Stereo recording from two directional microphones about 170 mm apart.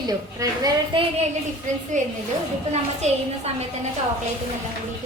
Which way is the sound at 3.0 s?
40° right (ahead or behind).